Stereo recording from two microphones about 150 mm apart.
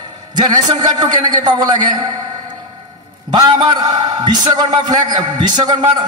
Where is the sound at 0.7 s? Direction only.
25° right (ahead or behind).